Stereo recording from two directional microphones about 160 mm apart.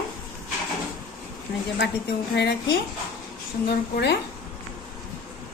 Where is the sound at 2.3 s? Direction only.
90° left.